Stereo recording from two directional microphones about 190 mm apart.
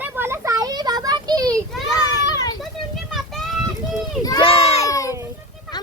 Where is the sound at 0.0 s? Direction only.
10° right (ahead or behind).